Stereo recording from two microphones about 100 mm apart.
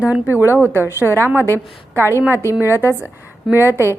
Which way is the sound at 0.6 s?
25° left (ahead or behind).